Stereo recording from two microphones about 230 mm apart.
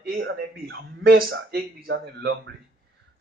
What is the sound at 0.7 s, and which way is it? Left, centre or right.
Speech, right.